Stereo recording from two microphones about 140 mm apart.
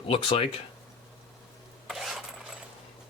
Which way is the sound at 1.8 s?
Centre (ahead or behind).